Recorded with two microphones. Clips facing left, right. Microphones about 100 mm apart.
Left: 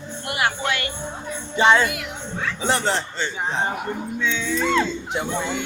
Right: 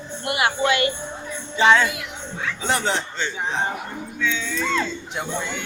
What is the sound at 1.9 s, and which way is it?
Music, 55° left (ahead or behind).